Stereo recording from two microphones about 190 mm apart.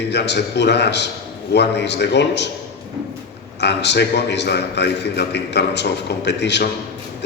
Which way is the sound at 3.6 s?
65° left (ahead or behind).